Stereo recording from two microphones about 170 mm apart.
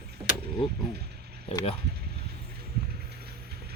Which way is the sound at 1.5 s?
35° left (ahead or behind).